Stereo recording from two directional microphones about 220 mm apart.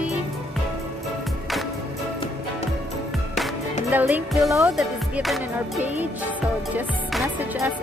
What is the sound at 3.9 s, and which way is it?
Speech, 5° right (ahead or behind).